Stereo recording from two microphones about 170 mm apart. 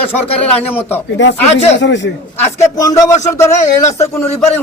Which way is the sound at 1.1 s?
90° left.